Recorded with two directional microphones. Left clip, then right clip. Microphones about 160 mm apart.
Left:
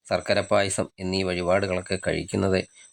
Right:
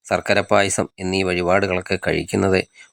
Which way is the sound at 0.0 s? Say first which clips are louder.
Right 5 dB; 20° right (ahead or behind).